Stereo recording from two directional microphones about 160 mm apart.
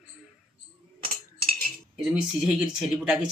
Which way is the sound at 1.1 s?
65° right (ahead or behind).